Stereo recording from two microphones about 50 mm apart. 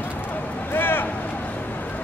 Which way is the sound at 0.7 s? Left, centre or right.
Left.